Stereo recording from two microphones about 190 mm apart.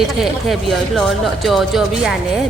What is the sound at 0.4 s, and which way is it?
A woman's voice, centre (ahead or behind).